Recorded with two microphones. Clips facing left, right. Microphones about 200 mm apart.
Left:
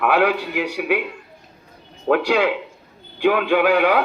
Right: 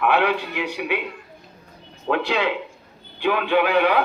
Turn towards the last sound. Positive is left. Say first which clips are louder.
# left 2 dB
turn(degrees=50)  # may be behind; listen again after turning